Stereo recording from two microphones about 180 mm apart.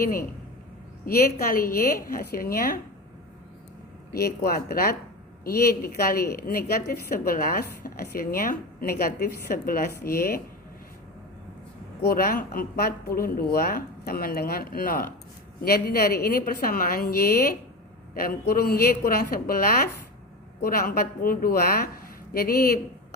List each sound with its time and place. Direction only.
0.0 s a woman's voice: 55° left (ahead or behind)
4.1 s a woman's voice: 60° left (ahead or behind)
12.0 s a woman's voice: 55° left (ahead or behind)